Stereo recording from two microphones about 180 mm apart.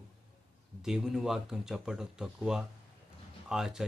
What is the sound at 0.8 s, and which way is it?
Speech, 5° right (ahead or behind).